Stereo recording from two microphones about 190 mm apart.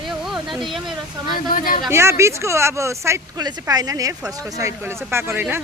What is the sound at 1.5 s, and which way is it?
Speech, 50° left (ahead or behind).